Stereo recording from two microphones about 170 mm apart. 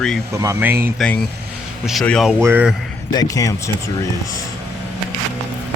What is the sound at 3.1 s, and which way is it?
Speech, 20° left (ahead or behind).